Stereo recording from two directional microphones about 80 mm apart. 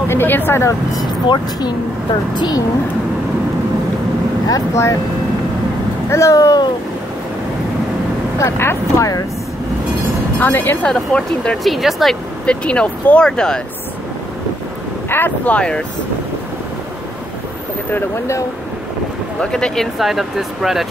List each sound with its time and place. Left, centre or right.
0.1 s speech: left
1.2 s speech: left
4.5 s speech: left
6.0 s speech: left
8.4 s speech: left
10.4 s speech: left
10.9 s speech: centre
12.4 s speech: centre
15.0 s speech: left
19.4 s speech: centre
20.0 s speech: centre